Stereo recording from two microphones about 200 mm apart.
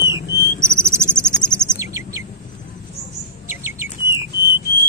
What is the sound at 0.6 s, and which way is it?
Cricket, 15° right (ahead or behind).